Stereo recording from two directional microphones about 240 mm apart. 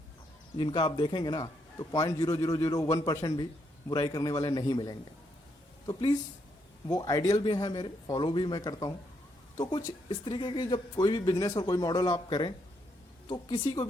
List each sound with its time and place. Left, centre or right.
0.6 s speech: centre